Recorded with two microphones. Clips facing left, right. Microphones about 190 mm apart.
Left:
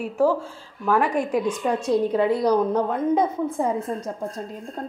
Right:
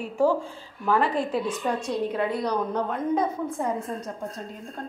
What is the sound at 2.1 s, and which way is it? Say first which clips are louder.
A woman's voice: left 6 dB; 25° left (ahead or behind).